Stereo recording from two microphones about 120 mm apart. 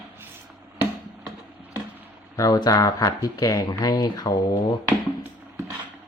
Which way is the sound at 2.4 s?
30° left (ahead or behind).